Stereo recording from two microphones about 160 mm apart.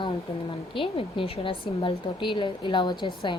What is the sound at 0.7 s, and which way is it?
A woman's voice, 35° left (ahead or behind).